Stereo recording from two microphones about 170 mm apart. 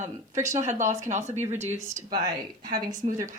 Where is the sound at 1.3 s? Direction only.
15° right (ahead or behind).